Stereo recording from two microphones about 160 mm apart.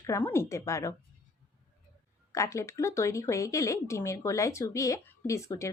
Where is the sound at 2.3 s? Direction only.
20° left (ahead or behind).